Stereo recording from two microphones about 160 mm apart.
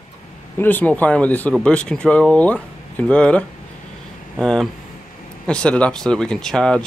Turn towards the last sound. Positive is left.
turn(degrees=5)  # may be behind; listen again after turning